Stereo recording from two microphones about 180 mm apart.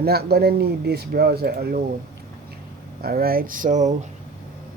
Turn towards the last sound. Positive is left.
turn(degrees=-45)  # may be behind; listen again after turning